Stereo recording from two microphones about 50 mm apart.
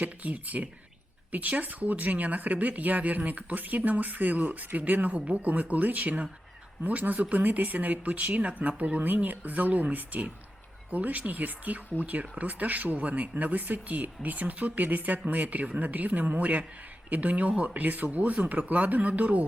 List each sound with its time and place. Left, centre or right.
0.0 s speech: right